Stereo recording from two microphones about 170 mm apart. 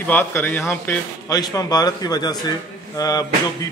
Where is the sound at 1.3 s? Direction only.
20° left (ahead or behind).